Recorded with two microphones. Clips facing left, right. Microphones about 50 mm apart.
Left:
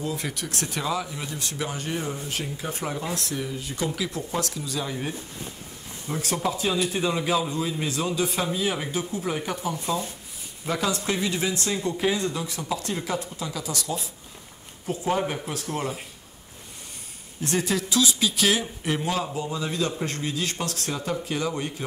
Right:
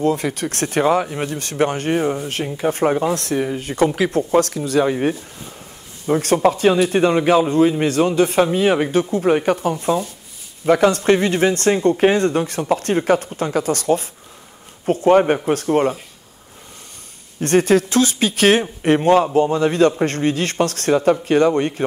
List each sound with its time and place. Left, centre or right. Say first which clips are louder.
0.0 s a man's voice: right 11 dB; right
17.4 s a man's voice: right 11 dB; right